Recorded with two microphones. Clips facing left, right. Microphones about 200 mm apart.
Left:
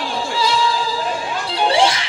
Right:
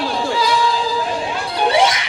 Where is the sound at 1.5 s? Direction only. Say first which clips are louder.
Right 1 dB; 30° left (ahead or behind).